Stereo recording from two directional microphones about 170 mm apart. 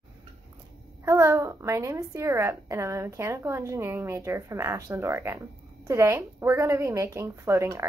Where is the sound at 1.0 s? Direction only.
15° right (ahead or behind).